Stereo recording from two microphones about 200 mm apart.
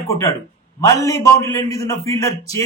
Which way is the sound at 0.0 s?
15° left (ahead or behind).